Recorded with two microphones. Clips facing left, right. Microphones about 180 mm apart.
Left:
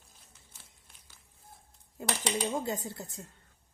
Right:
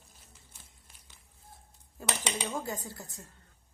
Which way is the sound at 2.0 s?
20° left (ahead or behind).